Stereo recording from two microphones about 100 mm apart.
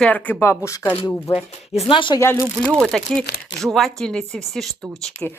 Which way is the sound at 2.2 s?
30° left (ahead or behind).